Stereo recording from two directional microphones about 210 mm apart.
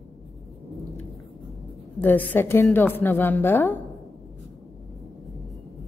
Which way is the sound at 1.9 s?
10° left (ahead or behind).